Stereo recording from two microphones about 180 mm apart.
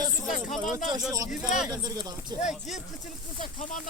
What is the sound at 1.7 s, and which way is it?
Speech, 20° right (ahead or behind).